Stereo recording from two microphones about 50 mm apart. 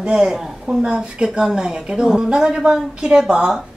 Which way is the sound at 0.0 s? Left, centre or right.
Centre.